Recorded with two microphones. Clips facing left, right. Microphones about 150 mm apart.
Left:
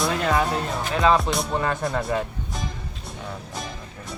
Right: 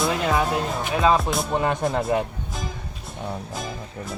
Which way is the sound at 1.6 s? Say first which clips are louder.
Right 2 dB; 25° right (ahead or behind).